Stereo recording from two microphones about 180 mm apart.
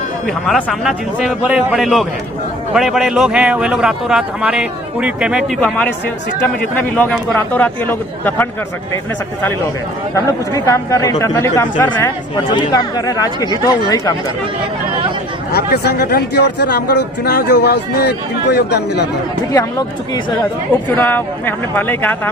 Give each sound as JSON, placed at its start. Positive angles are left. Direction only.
{"t": 0.3, "sound": "a man's voice", "side_deg": 0}
{"t": 5.5, "sound": "speech", "side_deg": 5}
{"t": 6.9, "sound": "speech", "side_deg": 10}
{"t": 10.2, "sound": "speech", "side_deg": 20}
{"t": 15.5, "sound": "a man's voice", "side_deg": 65}
{"t": 20.9, "sound": "speech", "side_deg": 10}